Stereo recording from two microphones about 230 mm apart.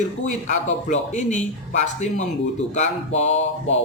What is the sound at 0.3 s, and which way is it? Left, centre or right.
Mantra, left.